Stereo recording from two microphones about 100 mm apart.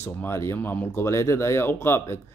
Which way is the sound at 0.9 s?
30° left (ahead or behind).